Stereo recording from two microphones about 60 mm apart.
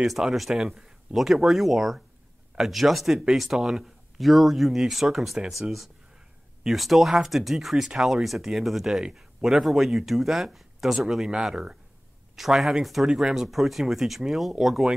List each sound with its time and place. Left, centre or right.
0.0 s speech: centre